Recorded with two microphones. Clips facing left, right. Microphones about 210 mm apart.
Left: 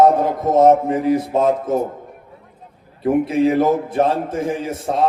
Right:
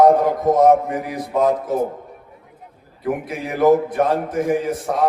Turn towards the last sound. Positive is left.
turn(degrees=25)  # may be behind; listen again after turning